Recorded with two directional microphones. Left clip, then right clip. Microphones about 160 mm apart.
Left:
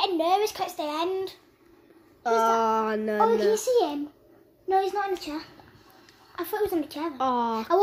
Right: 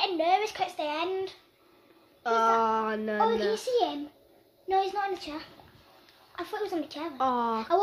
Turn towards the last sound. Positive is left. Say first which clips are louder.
# left 2 dB
turn(degrees=0)  # may be behind; listen again after turning